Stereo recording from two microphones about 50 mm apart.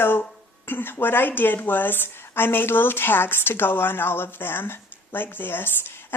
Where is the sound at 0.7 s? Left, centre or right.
Left.